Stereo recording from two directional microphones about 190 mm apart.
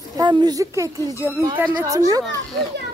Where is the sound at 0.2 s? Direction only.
20° right (ahead or behind).